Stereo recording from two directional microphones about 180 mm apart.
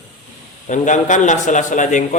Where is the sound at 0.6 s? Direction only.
45° left (ahead or behind).